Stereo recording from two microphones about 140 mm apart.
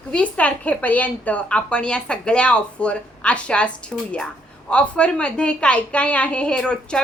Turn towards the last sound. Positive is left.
turn(degrees=5)  # may be behind; listen again after turning